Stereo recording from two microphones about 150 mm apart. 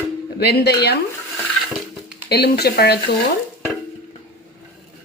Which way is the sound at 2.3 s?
90° left.